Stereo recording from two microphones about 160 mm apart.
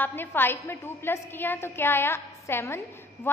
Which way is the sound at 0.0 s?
15° left (ahead or behind).